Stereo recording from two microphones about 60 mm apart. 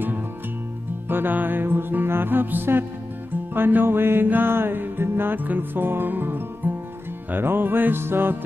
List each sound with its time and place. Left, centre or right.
1.0 s music: right